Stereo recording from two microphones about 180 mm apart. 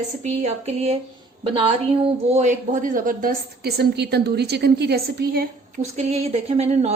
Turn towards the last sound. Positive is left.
turn(degrees=-35)  # may be behind; listen again after turning